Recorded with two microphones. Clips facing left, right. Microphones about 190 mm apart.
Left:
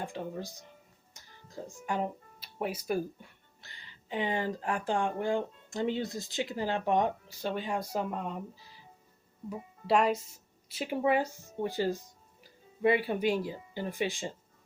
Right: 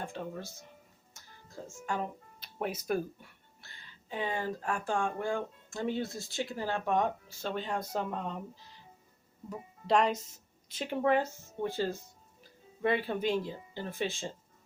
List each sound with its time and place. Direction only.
0.0 s speech: 15° left (ahead or behind)
1.1 s music: 15° left (ahead or behind)
2.6 s speech: 5° left (ahead or behind)
4.1 s speech: 15° left (ahead or behind)